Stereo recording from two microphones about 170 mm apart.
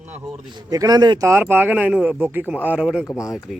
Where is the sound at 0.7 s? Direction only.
20° right (ahead or behind); by 3.0 s 5° right (ahead or behind).